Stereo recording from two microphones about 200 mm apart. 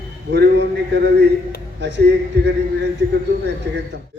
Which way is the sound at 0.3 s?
60° right (ahead or behind).